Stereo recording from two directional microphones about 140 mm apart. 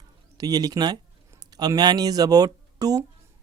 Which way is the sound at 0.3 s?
30° right (ahead or behind).